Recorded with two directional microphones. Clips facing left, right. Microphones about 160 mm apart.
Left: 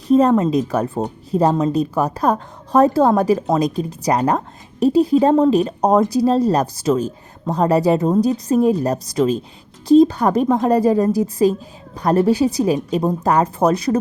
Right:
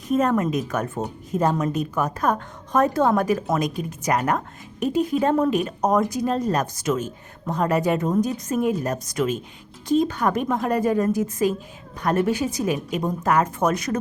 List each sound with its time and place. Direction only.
0.1 s a woman's voice: 30° left (ahead or behind)